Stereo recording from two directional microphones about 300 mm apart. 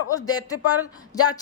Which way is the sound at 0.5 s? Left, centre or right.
Left.